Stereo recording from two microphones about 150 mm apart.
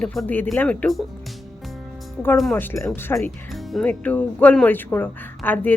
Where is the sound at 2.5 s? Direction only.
15° left (ahead or behind).